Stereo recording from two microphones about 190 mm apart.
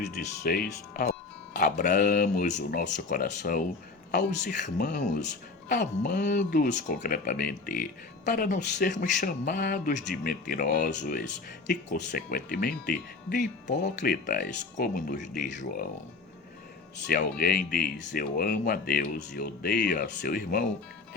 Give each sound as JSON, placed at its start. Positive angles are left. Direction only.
{"t": 0.4, "sound": "speech", "side_deg": 55}
{"t": 1.5, "sound": "speech", "side_deg": 45}
{"t": 17.1, "sound": "speech", "side_deg": 50}